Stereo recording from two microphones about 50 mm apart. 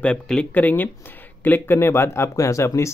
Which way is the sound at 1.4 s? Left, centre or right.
Left.